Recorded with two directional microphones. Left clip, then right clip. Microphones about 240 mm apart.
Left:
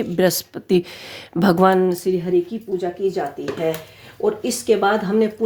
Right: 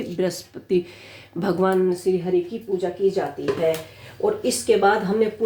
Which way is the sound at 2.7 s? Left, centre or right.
Left.